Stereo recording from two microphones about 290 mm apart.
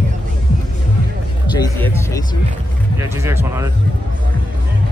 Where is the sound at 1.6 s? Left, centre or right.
Centre.